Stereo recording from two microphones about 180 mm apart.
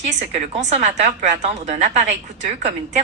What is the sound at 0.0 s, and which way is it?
A woman's voice, 40° right (ahead or behind).